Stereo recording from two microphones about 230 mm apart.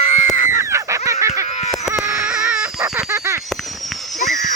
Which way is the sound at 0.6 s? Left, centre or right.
Centre.